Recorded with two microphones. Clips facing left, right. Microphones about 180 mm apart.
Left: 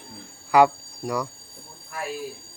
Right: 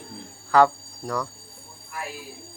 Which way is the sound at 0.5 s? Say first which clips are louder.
Left 1 dB; 10° left (ahead or behind).